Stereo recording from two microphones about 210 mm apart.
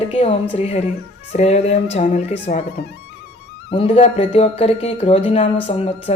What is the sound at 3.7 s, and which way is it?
Speech, 30° left (ahead or behind).